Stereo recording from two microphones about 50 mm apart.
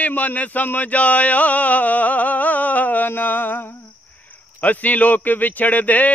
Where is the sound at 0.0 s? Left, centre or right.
Left.